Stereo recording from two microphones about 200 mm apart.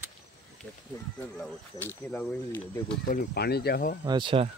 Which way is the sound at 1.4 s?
10° left (ahead or behind).